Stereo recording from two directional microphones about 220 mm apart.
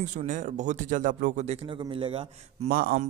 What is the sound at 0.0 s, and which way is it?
A man's voice, 35° right (ahead or behind).